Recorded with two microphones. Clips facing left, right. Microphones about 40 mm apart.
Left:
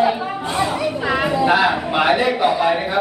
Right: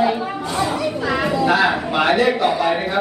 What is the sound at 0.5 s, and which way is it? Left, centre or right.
A man's voice, centre.